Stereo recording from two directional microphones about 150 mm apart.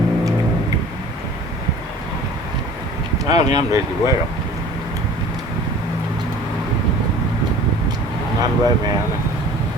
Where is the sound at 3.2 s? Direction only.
25° right (ahead or behind).